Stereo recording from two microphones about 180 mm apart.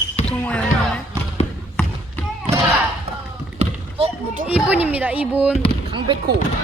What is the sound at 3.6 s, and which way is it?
Basketball bounce, 35° right (ahead or behind).